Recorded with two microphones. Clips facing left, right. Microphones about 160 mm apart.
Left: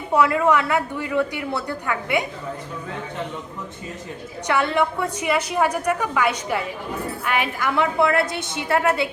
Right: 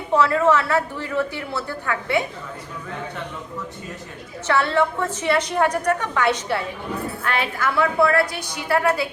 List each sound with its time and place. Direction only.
0.1 s a woman's voice: 15° left (ahead or behind)
4.4 s a woman's voice: 15° left (ahead or behind)